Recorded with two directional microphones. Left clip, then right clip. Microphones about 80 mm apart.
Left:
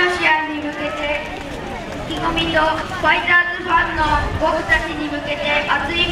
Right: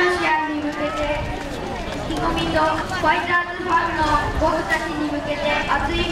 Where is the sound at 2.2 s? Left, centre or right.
Left.